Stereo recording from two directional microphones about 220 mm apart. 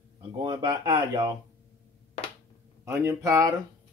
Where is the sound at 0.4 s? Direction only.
20° right (ahead or behind).